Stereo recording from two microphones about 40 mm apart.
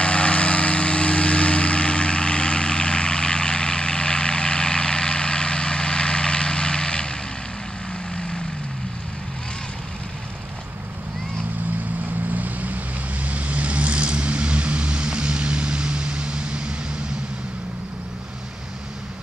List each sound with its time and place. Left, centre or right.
0.0 s vehicle: left
12.4 s vehicle: right